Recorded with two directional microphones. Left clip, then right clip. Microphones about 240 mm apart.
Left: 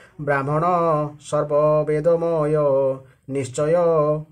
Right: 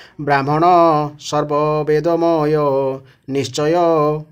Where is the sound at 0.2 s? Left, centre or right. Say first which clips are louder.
Right 6 dB; right.